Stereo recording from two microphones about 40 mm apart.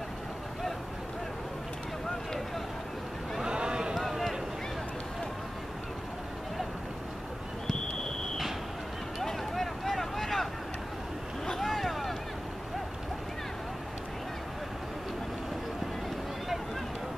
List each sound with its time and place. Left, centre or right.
3.4 s boat: right
9.2 s vehicle: centre
11.4 s boat: centre